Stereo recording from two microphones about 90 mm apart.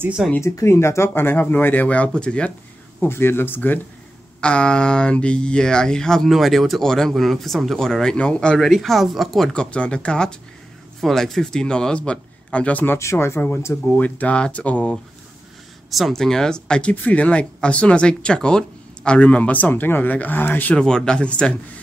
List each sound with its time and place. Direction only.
0.4 s speech: 30° left (ahead or behind); by 2.5 s 10° left (ahead or behind)
3.0 s speech: 25° left (ahead or behind)
13.8 s speech: 15° left (ahead or behind)
15.9 s speech: centre (ahead or behind); by 20.8 s 20° left (ahead or behind)
20.8 s speech: 10° left (ahead or behind)